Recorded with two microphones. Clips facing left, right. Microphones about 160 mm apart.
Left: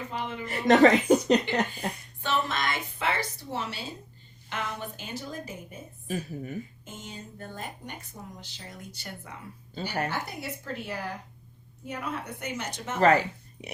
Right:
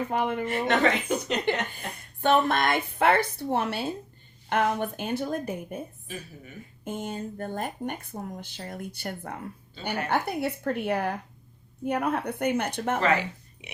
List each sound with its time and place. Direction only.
0.1 s speech: 55° right (ahead or behind)
0.4 s a woman's voice: 40° left (ahead or behind)
1.5 s speech: 55° right (ahead or behind)
6.1 s a woman's voice: 45° left (ahead or behind)
6.8 s speech: 55° right (ahead or behind)
13.0 s speech: 40° left (ahead or behind)